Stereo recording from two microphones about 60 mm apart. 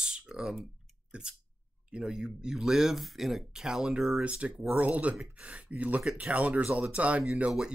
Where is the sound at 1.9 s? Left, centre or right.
Centre.